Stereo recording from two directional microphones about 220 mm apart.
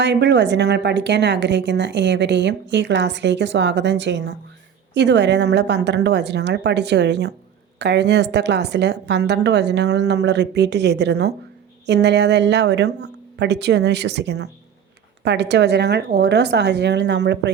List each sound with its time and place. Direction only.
0.0 s a woman's voice: 50° right (ahead or behind)